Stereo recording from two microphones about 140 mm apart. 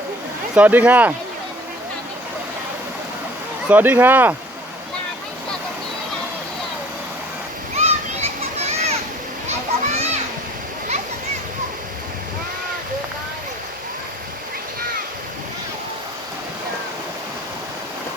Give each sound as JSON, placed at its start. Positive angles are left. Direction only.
{"t": 0.5, "sound": "speech", "side_deg": -10}
{"t": 3.7, "sound": "speech", "side_deg": -10}
{"t": 7.8, "sound": "children playing", "side_deg": -50}